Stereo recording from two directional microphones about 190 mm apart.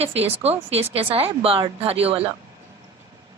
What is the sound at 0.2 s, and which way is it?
Speech, 30° right (ahead or behind).